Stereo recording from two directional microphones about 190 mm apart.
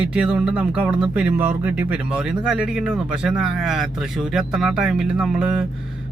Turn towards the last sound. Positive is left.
turn(degrees=-5)  # may be behind; listen again after turning